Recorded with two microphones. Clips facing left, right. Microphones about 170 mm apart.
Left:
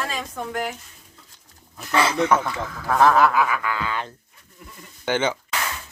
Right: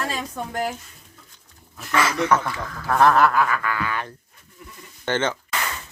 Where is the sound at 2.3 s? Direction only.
10° left (ahead or behind).